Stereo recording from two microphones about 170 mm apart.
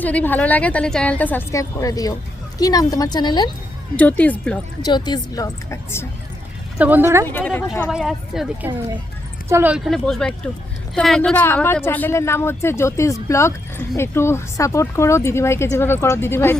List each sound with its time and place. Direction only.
0.0 s a woman's voice: 10° left (ahead or behind); by 3.5 s 25° left (ahead or behind)
3.9 s speech: 10° left (ahead or behind)
4.8 s a woman's voice: 25° left (ahead or behind)
6.7 s a woman's voice: 10° right (ahead or behind)
7.3 s speech: 10° left (ahead or behind)
7.7 s speech: centre (ahead or behind)
9.5 s a woman's voice: 15° right (ahead or behind)
9.7 s speech: centre (ahead or behind)